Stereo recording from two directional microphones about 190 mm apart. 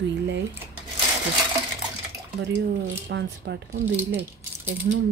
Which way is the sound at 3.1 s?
70° right (ahead or behind).